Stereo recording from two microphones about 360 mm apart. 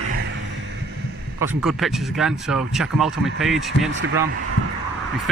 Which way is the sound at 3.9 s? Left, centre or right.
Right.